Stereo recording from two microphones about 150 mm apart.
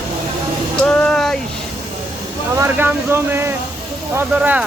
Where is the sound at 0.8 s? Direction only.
5° left (ahead or behind).